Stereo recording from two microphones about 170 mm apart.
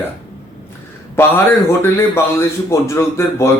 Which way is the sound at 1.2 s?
15° left (ahead or behind).